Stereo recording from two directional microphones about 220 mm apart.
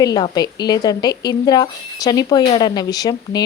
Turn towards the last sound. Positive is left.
turn(degrees=15)  # may be behind; listen again after turning